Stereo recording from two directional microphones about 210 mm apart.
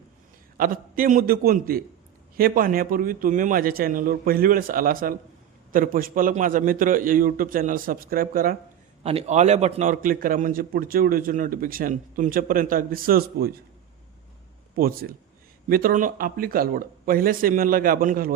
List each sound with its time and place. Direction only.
0.5 s a man's voice: 40° right (ahead or behind)
9.0 s a man's voice: 30° right (ahead or behind)
14.8 s speech: 45° right (ahead or behind)